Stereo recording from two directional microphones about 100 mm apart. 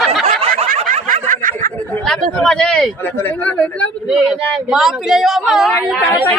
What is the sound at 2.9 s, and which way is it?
Speech, 20° left (ahead or behind).